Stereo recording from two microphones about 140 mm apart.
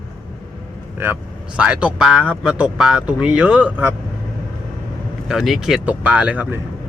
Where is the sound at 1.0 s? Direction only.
15° right (ahead or behind).